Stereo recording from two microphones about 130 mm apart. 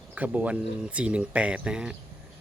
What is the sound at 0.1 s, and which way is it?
Speech, 10° right (ahead or behind).